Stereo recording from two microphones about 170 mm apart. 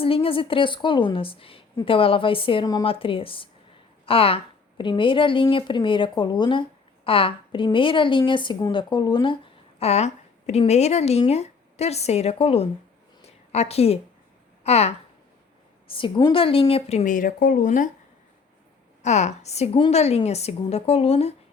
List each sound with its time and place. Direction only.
0.0 s a woman's voice: 35° left (ahead or behind)
13.2 s a sound: 40° left (ahead or behind)
14.6 s a woman's voice: 40° left (ahead or behind)
19.0 s a woman's voice: 45° left (ahead or behind)